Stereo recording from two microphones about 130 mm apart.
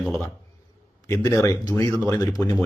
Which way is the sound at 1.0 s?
25° left (ahead or behind).